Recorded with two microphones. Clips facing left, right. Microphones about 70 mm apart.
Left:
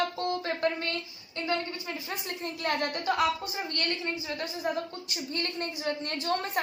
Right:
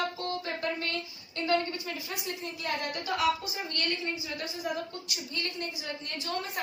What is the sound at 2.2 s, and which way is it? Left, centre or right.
A woman's voice, left.